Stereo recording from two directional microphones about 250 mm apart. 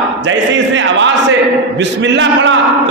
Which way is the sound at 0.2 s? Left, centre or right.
Right.